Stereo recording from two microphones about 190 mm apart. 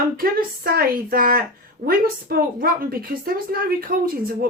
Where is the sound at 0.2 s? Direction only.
50° right (ahead or behind).